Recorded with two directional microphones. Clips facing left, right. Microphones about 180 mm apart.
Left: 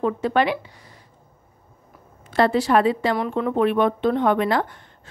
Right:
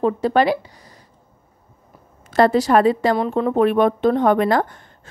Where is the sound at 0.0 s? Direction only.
35° right (ahead or behind).